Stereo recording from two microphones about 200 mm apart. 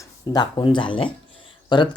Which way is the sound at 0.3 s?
20° left (ahead or behind).